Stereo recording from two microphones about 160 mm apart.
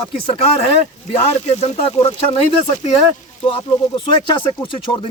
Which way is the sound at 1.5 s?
40° left (ahead or behind).